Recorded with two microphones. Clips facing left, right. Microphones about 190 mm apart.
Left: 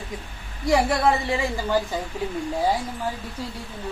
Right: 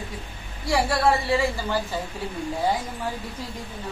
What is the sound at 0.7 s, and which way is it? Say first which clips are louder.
A woman's voice: left 2 dB; 20° left (ahead or behind).